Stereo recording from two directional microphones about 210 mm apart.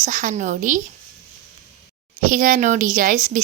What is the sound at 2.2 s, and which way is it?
Speech, 40° right (ahead or behind).